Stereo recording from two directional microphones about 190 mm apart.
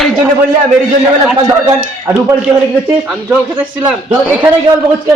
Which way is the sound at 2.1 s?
5° right (ahead or behind).